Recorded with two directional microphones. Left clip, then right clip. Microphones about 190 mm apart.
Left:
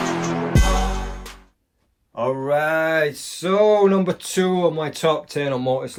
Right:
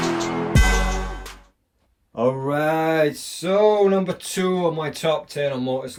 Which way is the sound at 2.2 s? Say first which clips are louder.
Left 1 dB; 30° right (ahead or behind).